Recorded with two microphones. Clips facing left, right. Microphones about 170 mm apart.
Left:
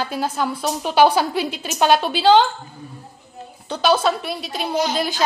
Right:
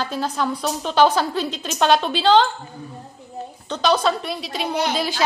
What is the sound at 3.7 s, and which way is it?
Speech, 5° left (ahead or behind).